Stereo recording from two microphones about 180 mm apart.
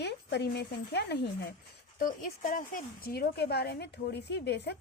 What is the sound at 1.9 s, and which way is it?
A woman's voice, 50° left (ahead or behind).